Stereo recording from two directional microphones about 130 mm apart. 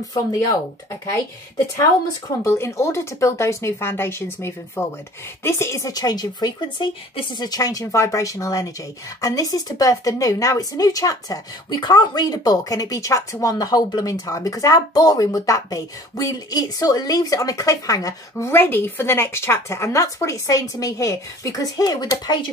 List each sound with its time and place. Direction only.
0.1 s speech: 30° left (ahead or behind)
1.8 s speech: 25° left (ahead or behind)